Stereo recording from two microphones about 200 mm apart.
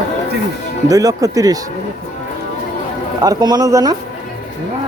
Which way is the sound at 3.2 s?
20° right (ahead or behind).